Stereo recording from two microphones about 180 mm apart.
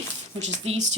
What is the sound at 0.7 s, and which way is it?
Speech, 35° right (ahead or behind).